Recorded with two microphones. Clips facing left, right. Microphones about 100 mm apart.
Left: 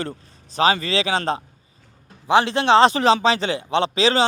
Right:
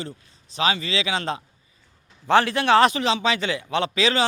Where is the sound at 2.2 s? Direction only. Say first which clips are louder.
Left 2 dB; 20° left (ahead or behind).